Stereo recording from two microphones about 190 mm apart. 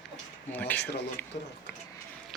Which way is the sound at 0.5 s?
10° left (ahead or behind).